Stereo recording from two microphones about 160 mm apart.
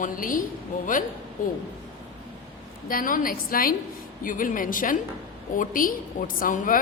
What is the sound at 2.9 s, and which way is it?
A woman's voice, 60° left (ahead or behind).